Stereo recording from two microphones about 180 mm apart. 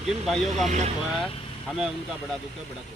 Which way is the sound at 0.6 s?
40° right (ahead or behind).